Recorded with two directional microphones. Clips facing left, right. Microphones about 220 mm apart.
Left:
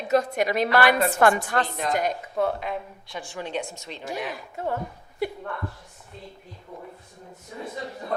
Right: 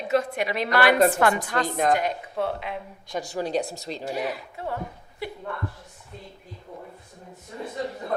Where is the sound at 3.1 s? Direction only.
40° right (ahead or behind).